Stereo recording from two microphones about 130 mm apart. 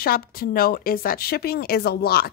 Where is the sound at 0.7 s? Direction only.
90° left.